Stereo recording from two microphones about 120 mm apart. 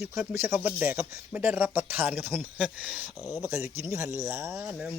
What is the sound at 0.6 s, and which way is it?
Speech, 15° right (ahead or behind).